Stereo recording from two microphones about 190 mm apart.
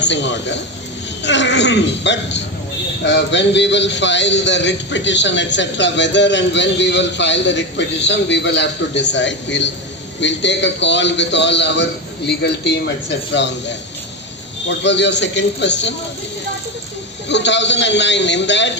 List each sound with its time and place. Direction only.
0.0 s a man's voice: 70° left (ahead or behind)
17.2 s a man's voice: 65° left (ahead or behind)